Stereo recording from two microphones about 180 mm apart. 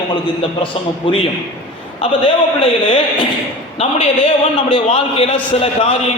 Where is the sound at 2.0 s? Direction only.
30° left (ahead or behind).